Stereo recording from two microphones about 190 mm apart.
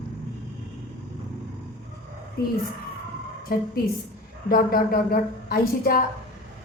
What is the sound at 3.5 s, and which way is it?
Speech, 50° left (ahead or behind).